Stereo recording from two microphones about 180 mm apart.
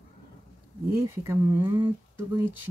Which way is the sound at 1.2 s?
15° right (ahead or behind).